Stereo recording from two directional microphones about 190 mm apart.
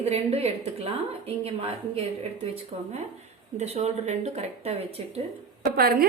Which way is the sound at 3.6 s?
35° right (ahead or behind).